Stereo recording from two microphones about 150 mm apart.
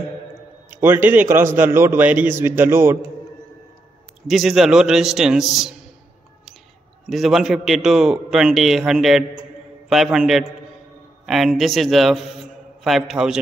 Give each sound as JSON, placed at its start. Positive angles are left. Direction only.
{"t": 0.7, "sound": "a man's voice", "side_deg": -15}
{"t": 4.3, "sound": "a man's voice", "side_deg": 0}
{"t": 7.1, "sound": "a man's voice", "side_deg": 0}